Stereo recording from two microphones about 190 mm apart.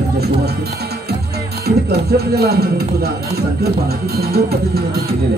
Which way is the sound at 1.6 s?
55° right (ahead or behind).